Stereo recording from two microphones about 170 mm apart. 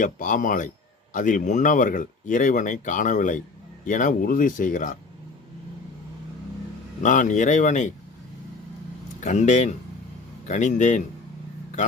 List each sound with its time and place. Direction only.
0.0 s speech: 50° left (ahead or behind)
7.0 s speech: 50° left (ahead or behind)
9.2 s speech: 45° left (ahead or behind)